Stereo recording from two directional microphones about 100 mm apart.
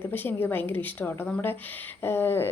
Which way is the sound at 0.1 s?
20° left (ahead or behind).